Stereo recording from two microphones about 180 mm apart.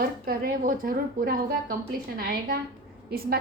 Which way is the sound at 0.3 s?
55° right (ahead or behind).